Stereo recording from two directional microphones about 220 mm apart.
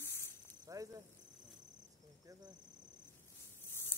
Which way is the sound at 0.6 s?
15° right (ahead or behind).